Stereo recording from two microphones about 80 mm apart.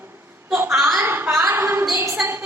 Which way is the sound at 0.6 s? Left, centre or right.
Centre.